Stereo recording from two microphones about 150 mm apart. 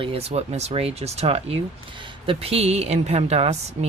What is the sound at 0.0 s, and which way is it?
A woman's voice, 40° right (ahead or behind).